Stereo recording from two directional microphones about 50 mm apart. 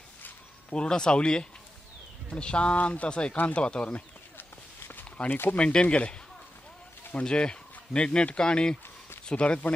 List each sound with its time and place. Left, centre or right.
0.7 s speech: centre
4.4 s walk: left
5.3 s speech: left
5.6 s speech: left
7.2 s speech: centre